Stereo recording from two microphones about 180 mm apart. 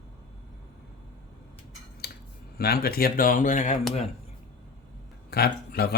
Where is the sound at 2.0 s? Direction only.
60° left (ahead or behind).